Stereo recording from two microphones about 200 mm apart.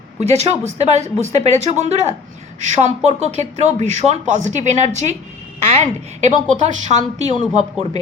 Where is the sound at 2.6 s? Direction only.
35° right (ahead or behind).